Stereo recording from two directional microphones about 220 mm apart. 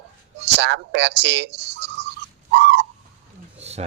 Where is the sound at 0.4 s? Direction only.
50° right (ahead or behind).